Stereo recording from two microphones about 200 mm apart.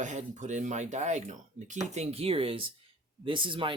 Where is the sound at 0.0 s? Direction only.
35° right (ahead or behind).